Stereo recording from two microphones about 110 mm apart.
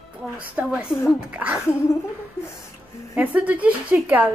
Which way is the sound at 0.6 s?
5° right (ahead or behind).